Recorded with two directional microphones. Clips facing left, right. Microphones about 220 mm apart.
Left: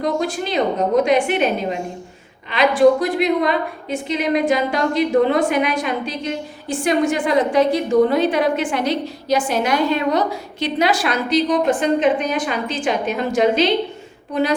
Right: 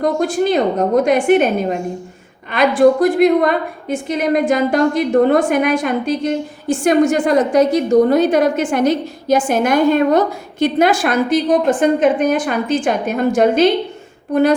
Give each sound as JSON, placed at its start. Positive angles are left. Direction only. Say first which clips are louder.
{"t": 0.0, "sound": "a woman's voice", "louder": "right 5 dB", "side_deg": -50}